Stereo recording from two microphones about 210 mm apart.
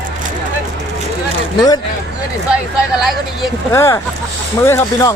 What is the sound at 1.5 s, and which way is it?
Speech, 20° left (ahead or behind).